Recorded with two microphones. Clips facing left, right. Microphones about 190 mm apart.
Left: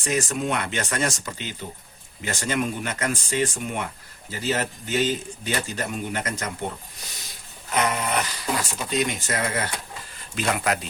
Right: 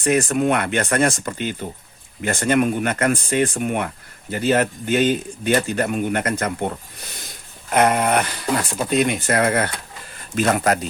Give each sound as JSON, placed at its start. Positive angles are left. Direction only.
{"t": 0.0, "sound": "speech", "side_deg": -55}
{"t": 7.7, "sound": "speech", "side_deg": -55}
{"t": 10.3, "sound": "speech", "side_deg": -45}